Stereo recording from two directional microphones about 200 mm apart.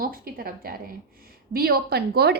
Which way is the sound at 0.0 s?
45° right (ahead or behind).